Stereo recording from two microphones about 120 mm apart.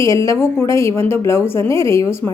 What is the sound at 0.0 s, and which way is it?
A woman's voice, 25° left (ahead or behind).